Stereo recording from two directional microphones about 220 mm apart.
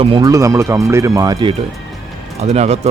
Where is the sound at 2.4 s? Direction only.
30° right (ahead or behind).